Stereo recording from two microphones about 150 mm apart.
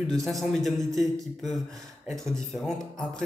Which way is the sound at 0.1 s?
Centre (ahead or behind).